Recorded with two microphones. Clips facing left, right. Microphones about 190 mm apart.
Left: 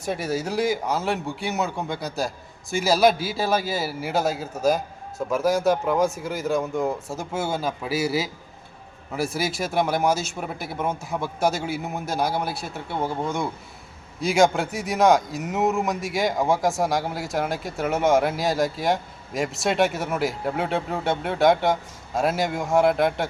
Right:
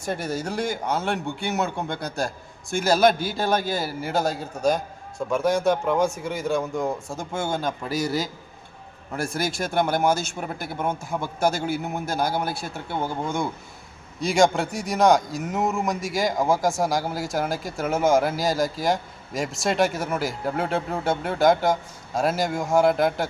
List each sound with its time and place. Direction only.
0.0 s speech: centre (ahead or behind)